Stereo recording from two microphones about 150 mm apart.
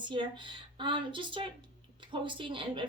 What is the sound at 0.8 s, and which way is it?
A woman's voice, 35° right (ahead or behind).